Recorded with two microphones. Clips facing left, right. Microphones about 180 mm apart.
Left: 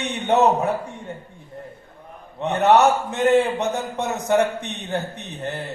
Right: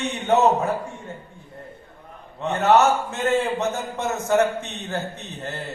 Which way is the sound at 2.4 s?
20° left (ahead or behind).